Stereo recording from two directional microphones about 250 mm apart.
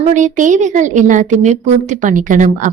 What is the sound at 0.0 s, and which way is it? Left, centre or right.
A woman's voice, right.